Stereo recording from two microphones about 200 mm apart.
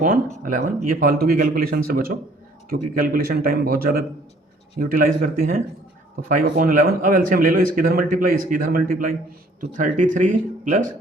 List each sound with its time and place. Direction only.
0.4 s speech: 40° right (ahead or behind)